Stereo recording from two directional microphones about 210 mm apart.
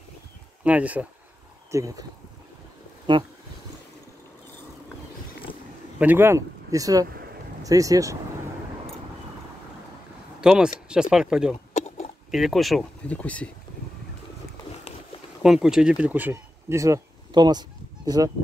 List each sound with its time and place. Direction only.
0.7 s speech: 5° right (ahead or behind)
3.1 s speech: 20° right (ahead or behind)
5.9 s speech: 10° right (ahead or behind)
10.4 s speech: 5° right (ahead or behind)
11.7 s a sound: 30° left (ahead or behind)
12.3 s speech: centre (ahead or behind)
15.4 s speech: centre (ahead or behind); by 18.3 s 20° right (ahead or behind)